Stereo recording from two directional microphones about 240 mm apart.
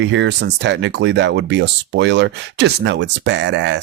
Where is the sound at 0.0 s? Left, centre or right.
Right.